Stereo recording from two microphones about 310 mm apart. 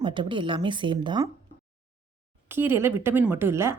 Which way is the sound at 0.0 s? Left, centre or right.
Centre.